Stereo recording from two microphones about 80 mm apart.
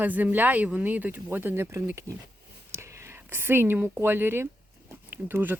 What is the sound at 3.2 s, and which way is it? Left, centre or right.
Speech, right.